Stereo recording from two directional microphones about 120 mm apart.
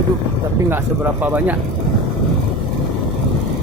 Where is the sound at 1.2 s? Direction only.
15° right (ahead or behind).